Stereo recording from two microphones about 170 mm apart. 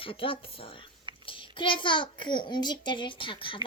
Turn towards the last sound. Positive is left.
turn(degrees=30)  # may be behind; listen again after turning